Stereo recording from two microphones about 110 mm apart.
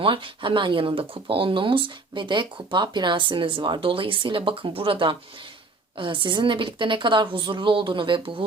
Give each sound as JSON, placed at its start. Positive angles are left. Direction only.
{"t": 0.0, "sound": "speech", "side_deg": -50}